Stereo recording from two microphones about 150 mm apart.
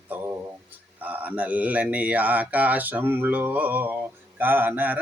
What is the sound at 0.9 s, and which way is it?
Speech, 10° right (ahead or behind).